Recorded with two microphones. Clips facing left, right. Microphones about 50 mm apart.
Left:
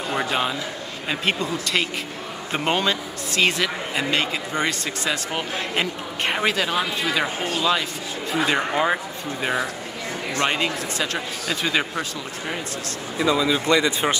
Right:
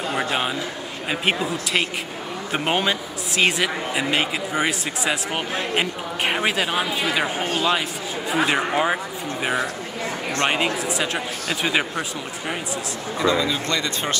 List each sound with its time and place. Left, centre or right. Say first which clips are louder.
0.1 s a sound: left 1 dB; centre
1.2 s a man's voice: right 1 dB; centre
7.3 s speech: right 1 dB; right
8.3 s a man's voice: right 1 dB; centre
13.2 s speech: left 1 dB; centre